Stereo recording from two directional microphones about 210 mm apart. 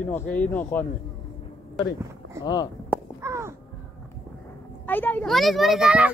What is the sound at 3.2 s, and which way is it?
Crow, 15° right (ahead or behind).